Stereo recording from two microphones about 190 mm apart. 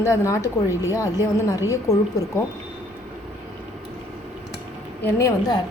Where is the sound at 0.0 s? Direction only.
15° left (ahead or behind).